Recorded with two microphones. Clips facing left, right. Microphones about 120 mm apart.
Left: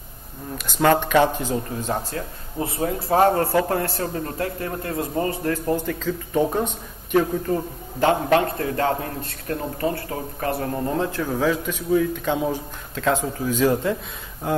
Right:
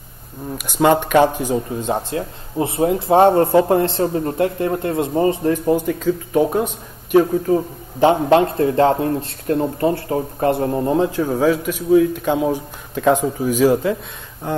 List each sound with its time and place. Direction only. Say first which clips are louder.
0.7 s speech: right 3 dB; 15° right (ahead or behind)
8.0 s speech: right 5 dB; 20° right (ahead or behind)